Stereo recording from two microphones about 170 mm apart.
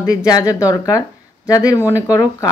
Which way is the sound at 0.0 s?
20° left (ahead or behind).